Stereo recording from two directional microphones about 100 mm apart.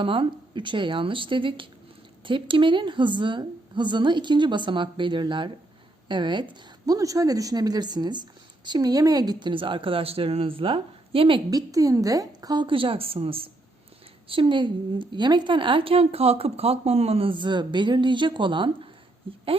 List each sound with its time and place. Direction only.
0.0 s speech: 60° right (ahead or behind)
6.8 s speech: 35° right (ahead or behind); by 11.4 s 60° right (ahead or behind)
11.5 s speech: 35° right (ahead or behind); by 13.5 s 70° right (ahead or behind)
14.3 s speech: 55° right (ahead or behind)